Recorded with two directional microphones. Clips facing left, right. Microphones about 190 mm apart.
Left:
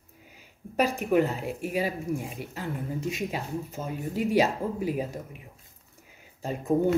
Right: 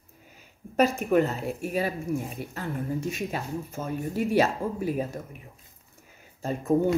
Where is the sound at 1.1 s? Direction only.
10° left (ahead or behind).